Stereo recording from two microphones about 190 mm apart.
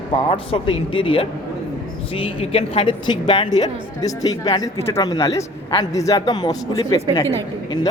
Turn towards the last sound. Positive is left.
turn(degrees=15)  # may be behind; listen again after turning